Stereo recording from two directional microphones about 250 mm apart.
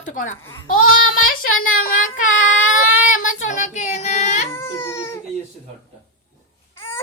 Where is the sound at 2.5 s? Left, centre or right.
Left.